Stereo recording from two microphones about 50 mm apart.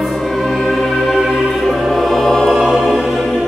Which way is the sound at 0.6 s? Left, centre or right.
Centre.